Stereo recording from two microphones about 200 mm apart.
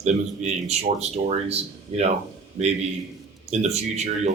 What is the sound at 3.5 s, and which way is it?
Speech, 35° right (ahead or behind).